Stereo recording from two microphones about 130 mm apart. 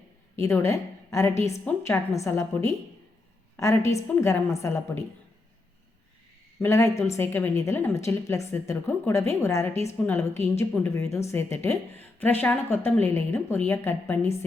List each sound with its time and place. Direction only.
0.3 s a woman's voice: 20° left (ahead or behind)
3.9 s a woman's voice: 20° left (ahead or behind)
6.6 s a woman's voice: 20° left (ahead or behind)